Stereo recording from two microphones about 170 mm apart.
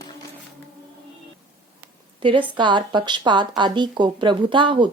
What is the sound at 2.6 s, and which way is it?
Speech, 25° right (ahead or behind).